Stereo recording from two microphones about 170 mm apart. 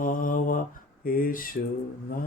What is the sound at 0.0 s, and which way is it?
Mantra, 55° left (ahead or behind).